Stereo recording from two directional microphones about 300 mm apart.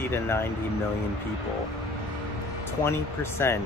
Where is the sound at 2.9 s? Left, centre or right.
Centre.